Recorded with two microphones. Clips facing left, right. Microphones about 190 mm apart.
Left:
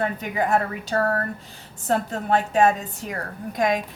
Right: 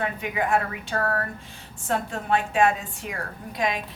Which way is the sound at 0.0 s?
40° left (ahead or behind).